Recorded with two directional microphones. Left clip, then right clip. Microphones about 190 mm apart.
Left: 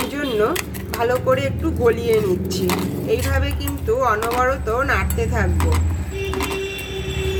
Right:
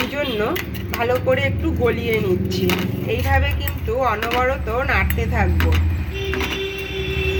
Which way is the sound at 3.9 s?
5° left (ahead or behind).